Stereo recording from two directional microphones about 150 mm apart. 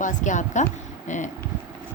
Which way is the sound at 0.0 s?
55° left (ahead or behind).